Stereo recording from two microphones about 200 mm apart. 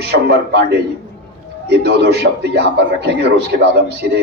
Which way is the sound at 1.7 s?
55° right (ahead or behind).